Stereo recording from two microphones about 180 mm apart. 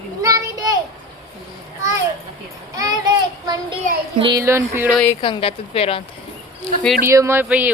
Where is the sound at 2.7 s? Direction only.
20° right (ahead or behind).